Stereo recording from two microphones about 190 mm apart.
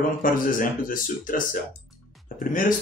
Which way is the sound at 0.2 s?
45° left (ahead or behind).